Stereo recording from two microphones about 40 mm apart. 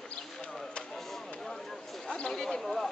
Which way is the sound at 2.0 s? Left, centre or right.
Left.